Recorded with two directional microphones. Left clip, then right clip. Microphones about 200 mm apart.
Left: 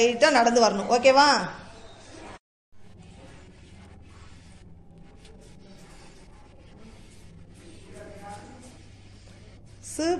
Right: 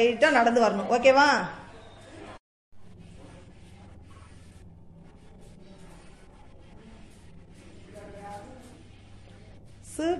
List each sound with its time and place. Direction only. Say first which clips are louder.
0.0 s a woman's voice: left 1 dB; 5° left (ahead or behind)
10.0 s a woman's voice: left 2 dB; 5° right (ahead or behind)